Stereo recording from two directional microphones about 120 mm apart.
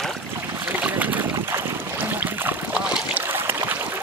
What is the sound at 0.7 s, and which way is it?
Boat, 15° right (ahead or behind).